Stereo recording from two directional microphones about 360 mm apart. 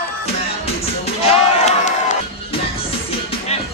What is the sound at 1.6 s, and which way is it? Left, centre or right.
Crowd, centre.